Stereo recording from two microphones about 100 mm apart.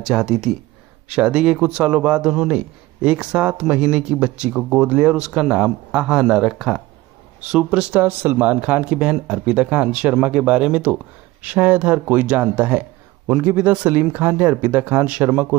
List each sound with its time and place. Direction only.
0.0 s a man's voice: 5° right (ahead or behind)